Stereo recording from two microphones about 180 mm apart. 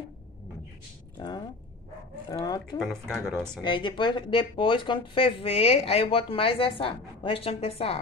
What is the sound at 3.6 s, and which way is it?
Speech, 25° left (ahead or behind).